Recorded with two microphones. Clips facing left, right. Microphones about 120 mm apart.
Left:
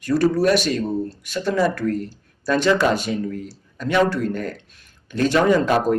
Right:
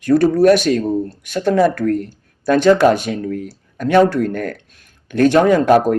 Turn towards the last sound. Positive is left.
turn(degrees=-55)  # may be behind; listen again after turning